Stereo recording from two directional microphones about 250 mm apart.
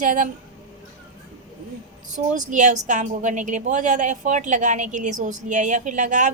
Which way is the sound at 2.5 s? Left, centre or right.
Right.